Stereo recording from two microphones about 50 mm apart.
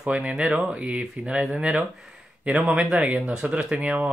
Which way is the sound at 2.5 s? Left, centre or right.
Right.